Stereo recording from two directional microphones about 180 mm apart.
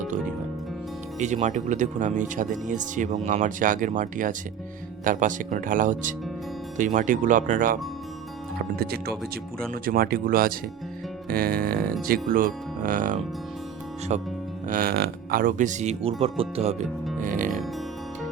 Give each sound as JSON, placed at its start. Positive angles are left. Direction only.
{"t": 1.2, "sound": "speech", "side_deg": -40}
{"t": 8.7, "sound": "speech", "side_deg": -60}
{"t": 14.7, "sound": "speech", "side_deg": -55}
{"t": 17.2, "sound": "music", "side_deg": -45}